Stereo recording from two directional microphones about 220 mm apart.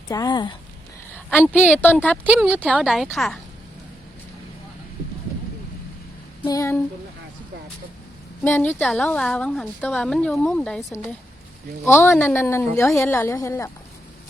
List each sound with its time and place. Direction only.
0.1 s speech: 15° left (ahead or behind)
1.3 s a woman's voice: 10° left (ahead or behind)
1.5 s a woman's voice: 5° right (ahead or behind)
6.4 s a woman's voice: 15° left (ahead or behind)
8.4 s a woman's voice: 10° left (ahead or behind)